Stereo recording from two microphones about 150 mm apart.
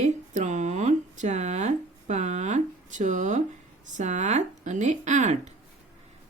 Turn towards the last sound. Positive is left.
turn(degrees=-50)  # may be behind; listen again after turning